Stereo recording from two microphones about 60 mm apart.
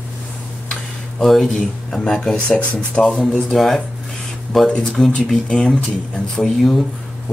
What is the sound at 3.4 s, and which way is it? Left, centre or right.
Speech, centre.